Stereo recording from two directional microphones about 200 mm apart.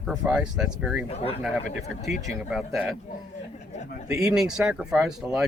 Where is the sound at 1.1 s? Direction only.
30° left (ahead or behind).